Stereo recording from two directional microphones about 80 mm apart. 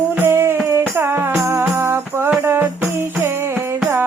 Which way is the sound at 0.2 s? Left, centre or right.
Right.